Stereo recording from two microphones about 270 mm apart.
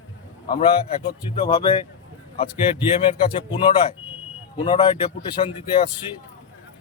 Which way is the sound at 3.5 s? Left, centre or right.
Centre.